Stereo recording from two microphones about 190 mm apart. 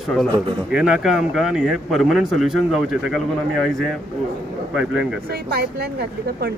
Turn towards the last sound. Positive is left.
turn(degrees=-55)  # may be behind; listen again after turning